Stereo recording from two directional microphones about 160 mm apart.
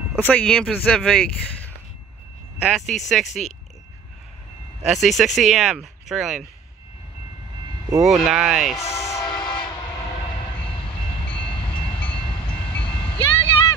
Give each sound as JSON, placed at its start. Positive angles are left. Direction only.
{"t": 0.2, "sound": "speech", "side_deg": 10}
{"t": 2.9, "sound": "speech", "side_deg": 0}
{"t": 4.8, "sound": "speech", "side_deg": 0}
{"t": 8.0, "sound": "speech", "side_deg": -5}
{"t": 8.7, "sound": "a sound", "side_deg": 20}
{"t": 11.2, "sound": "train", "side_deg": 5}
{"t": 12.2, "sound": "train", "side_deg": 30}
{"t": 12.4, "sound": "train", "side_deg": 10}
{"t": 12.9, "sound": "vehicle", "side_deg": 10}